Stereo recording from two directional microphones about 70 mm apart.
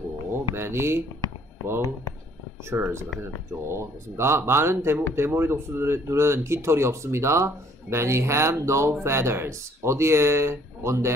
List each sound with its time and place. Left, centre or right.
0.3 s speech: right
2.7 s speech: right